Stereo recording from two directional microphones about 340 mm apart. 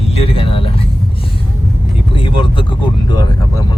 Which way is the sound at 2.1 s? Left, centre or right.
Centre.